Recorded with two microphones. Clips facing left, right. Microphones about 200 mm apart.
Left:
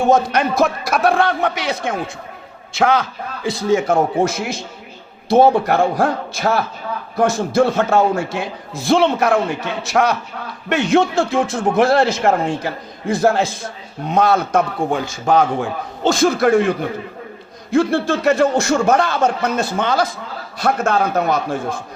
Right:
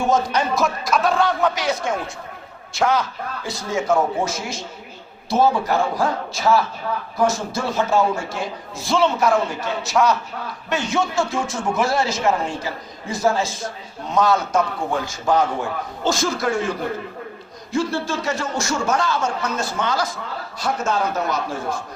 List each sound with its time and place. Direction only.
0.1 s a man's voice: 60° left (ahead or behind)
16.0 s a man's voice: 60° left (ahead or behind)